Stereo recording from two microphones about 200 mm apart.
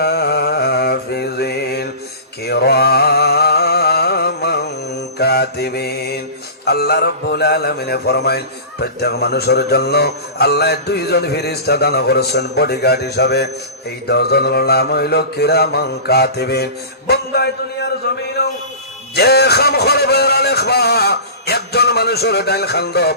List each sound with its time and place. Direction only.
0.0 s mantra: 55° left (ahead or behind)
2.4 s a sound: 55° left (ahead or behind)
6.7 s mantra: 55° left (ahead or behind)
17.1 s a man's voice: 55° left (ahead or behind)
19.1 s mantra: 55° left (ahead or behind)